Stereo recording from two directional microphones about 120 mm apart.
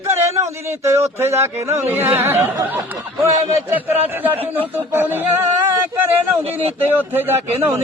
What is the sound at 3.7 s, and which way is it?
A man's voice, 15° right (ahead or behind).